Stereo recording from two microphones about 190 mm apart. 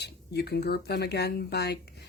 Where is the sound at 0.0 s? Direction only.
60° left (ahead or behind).